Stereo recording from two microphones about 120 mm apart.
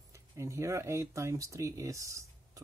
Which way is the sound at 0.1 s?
25° right (ahead or behind).